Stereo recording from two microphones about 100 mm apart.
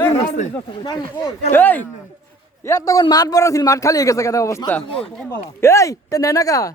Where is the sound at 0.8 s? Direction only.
40° left (ahead or behind).